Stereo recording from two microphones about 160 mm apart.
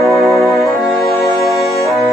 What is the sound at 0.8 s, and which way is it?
Music, 20° left (ahead or behind).